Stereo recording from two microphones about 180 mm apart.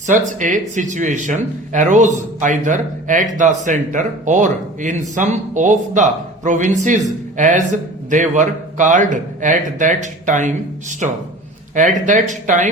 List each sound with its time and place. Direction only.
0.1 s speech: 45° right (ahead or behind)